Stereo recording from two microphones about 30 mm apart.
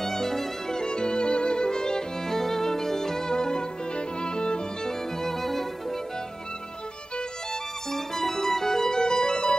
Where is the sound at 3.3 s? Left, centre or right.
Left.